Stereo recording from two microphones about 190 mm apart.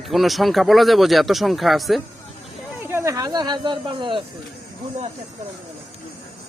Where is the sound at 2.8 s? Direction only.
15° right (ahead or behind).